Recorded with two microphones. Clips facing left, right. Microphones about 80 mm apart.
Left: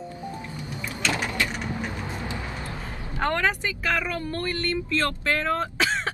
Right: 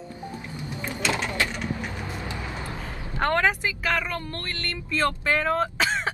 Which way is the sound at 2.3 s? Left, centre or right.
Right.